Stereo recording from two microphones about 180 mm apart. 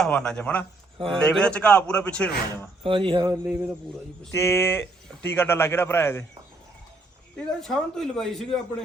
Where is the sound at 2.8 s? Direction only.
30° right (ahead or behind).